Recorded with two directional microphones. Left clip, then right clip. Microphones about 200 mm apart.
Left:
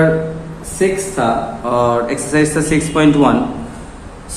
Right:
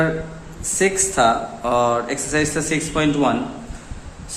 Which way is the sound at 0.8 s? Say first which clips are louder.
Left 1 dB; 45° right (ahead or behind).